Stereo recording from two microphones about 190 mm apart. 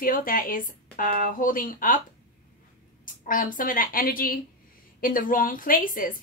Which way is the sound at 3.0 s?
45° left (ahead or behind).